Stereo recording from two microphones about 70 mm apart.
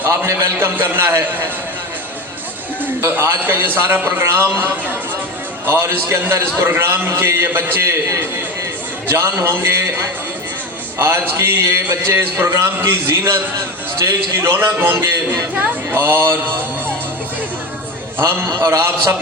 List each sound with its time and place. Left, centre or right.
0.0 s a man's voice: right
2.8 s a man's voice: right
18.2 s a man's voice: right